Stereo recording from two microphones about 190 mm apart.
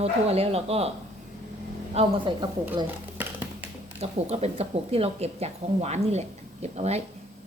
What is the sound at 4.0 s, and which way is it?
Speech, 35° right (ahead or behind).